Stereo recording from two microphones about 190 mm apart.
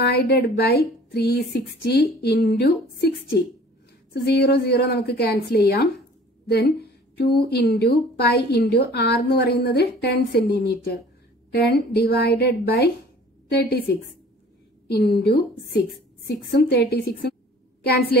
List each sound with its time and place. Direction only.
0.0 s a woman's voice: 60° left (ahead or behind)
14.9 s a woman's voice: 60° left (ahead or behind)